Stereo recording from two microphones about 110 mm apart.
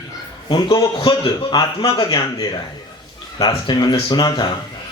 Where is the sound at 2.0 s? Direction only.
35° left (ahead or behind).